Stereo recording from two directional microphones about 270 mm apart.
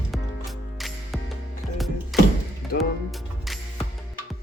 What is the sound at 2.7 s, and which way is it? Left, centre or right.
Music, left.